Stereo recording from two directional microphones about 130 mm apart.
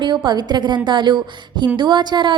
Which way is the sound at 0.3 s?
35° right (ahead or behind).